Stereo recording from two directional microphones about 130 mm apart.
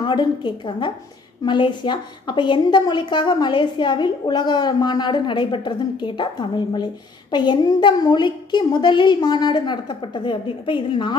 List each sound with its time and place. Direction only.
0.0 s a woman's voice: 35° left (ahead or behind)